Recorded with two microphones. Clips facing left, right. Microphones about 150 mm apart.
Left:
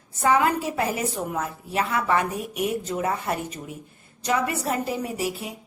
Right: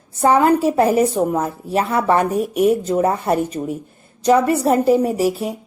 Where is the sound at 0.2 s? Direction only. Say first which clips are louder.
Right 7 dB; 40° right (ahead or behind).